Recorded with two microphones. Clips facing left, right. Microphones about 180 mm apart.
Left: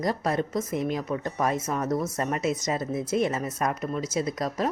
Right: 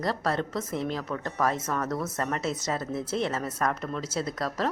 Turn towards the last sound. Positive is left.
turn(degrees=15)  # may be behind; listen again after turning